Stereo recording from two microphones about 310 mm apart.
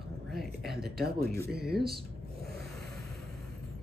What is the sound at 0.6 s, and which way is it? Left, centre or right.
Speech, centre.